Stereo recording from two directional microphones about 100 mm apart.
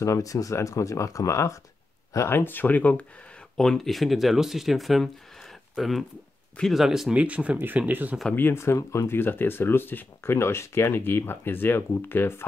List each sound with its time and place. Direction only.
0.0 s speech: 35° left (ahead or behind); by 8.2 s 15° right (ahead or behind)
8.4 s speech: 25° left (ahead or behind)